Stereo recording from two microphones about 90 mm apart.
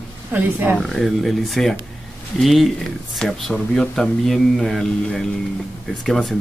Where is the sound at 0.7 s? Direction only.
Centre (ahead or behind).